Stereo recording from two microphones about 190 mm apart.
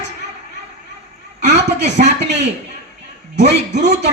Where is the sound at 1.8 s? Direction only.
35° right (ahead or behind).